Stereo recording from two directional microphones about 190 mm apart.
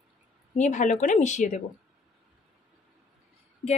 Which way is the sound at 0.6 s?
40° left (ahead or behind).